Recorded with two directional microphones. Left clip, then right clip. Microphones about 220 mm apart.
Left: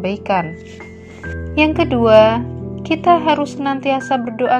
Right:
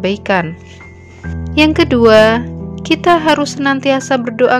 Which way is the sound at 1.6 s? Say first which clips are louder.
Right 4 dB; 30° right (ahead or behind).